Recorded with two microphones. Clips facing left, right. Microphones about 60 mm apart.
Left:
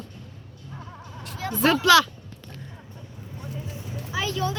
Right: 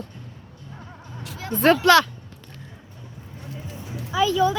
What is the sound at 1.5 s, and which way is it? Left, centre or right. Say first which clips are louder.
Speech: right 2 dB; right.